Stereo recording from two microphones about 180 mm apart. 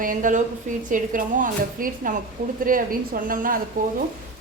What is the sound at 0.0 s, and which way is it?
A woman's voice, 45° right (ahead or behind).